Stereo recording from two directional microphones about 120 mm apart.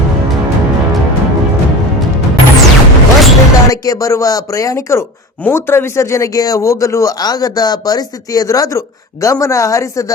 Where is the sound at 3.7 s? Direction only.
30° left (ahead or behind).